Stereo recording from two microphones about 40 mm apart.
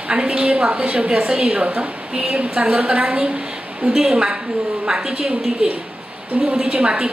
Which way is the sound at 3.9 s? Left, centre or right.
Centre.